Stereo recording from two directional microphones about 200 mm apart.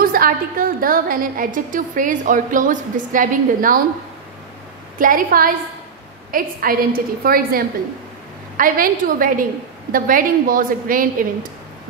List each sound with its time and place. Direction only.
0.0 s a woman's voice: 45° right (ahead or behind)
4.9 s a woman's voice: 45° right (ahead or behind)